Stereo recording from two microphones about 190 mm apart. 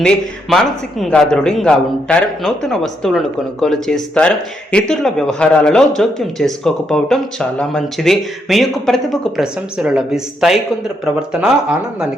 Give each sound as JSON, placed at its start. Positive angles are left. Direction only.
{"t": 0.0, "sound": "speech", "side_deg": 5}